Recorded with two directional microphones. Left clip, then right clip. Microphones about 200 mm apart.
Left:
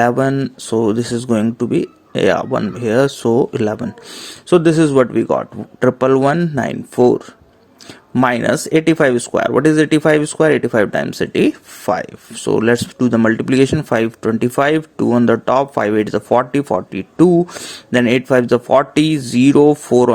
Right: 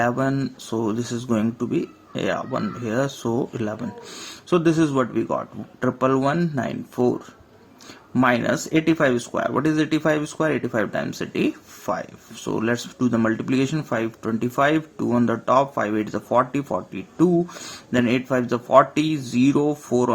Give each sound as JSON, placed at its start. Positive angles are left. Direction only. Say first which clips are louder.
{"t": 0.0, "sound": "speech", "louder": "left 8 dB", "side_deg": 40}